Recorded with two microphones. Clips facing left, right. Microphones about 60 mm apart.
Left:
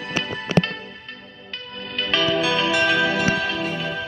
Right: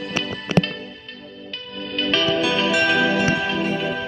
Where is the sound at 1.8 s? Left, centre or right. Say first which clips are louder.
Right 1 dB; centre.